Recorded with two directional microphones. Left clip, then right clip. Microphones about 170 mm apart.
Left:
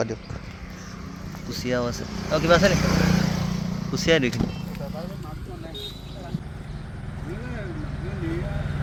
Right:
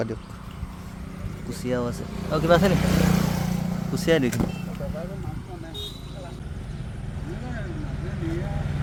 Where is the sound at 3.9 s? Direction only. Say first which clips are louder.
Left 1 dB; 20° right (ahead or behind).